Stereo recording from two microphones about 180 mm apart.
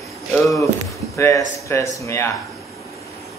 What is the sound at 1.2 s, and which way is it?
Speech, 15° left (ahead or behind).